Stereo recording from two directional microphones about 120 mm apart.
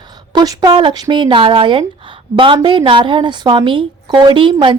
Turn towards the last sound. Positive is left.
turn(degrees=-45)  # may be behind; listen again after turning